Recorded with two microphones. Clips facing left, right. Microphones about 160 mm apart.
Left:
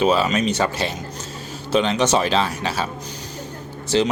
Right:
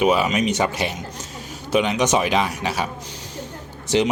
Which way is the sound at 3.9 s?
15° right (ahead or behind).